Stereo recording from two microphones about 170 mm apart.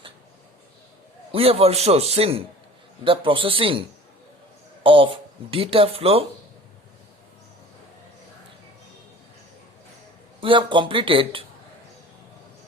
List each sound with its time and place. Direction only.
1.3 s speech: 35° right (ahead or behind)
10.4 s speech: 30° right (ahead or behind)